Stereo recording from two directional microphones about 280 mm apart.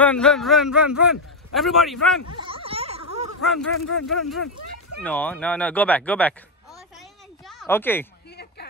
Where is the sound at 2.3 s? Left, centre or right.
Centre.